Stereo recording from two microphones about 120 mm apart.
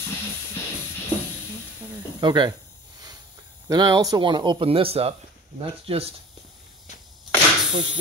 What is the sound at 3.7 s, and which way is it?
Speech, 35° right (ahead or behind).